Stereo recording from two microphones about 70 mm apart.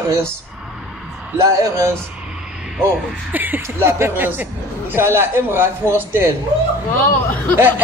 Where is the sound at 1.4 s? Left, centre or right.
Right.